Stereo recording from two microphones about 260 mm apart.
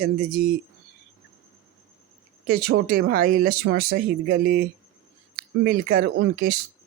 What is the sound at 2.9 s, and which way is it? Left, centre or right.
Speech, right.